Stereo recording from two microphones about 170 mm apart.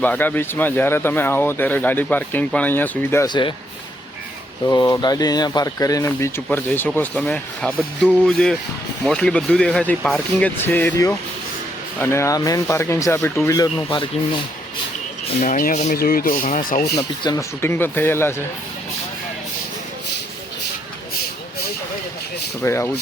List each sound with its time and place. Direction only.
0.0 s speech: 10° left (ahead or behind)
3.2 s speech: 25° left (ahead or behind)
4.6 s speech: 25° left (ahead or behind)
11.9 s speech: 15° left (ahead or behind)
13.9 s speech: 30° left (ahead or behind)
15.4 s speech: 55° left (ahead or behind)
16.0 s speech: 55° left (ahead or behind)
16.9 s speech: 20° left (ahead or behind)
22.6 s speech: 15° left (ahead or behind)